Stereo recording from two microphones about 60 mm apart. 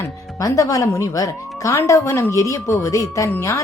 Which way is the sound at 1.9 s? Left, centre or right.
Left.